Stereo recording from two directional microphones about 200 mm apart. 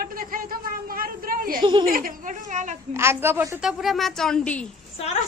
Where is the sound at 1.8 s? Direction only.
45° right (ahead or behind).